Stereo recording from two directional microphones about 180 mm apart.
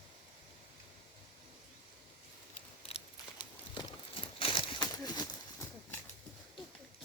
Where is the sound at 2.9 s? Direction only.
30° left (ahead or behind).